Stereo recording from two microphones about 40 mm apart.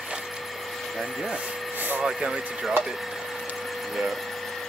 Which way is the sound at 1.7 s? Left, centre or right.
Right.